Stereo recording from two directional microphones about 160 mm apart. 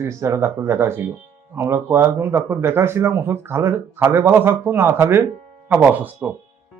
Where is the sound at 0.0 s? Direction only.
15° right (ahead or behind).